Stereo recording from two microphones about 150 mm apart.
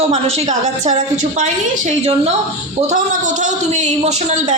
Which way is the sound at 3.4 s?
50° right (ahead or behind).